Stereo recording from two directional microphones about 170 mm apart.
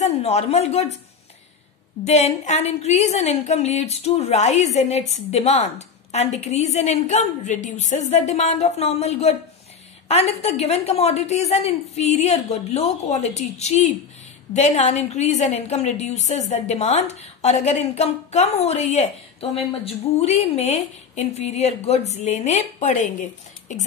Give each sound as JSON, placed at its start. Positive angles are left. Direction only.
{"t": 0.0, "sound": "speech", "side_deg": 40}
{"t": 2.0, "sound": "a woman's voice", "side_deg": 40}